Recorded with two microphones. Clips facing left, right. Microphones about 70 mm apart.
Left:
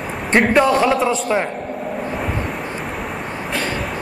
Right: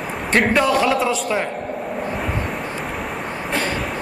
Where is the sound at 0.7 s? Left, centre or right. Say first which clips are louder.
Left 2 dB; left.